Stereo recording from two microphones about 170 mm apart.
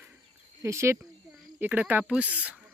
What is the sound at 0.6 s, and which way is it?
A child's voice, 15° right (ahead or behind).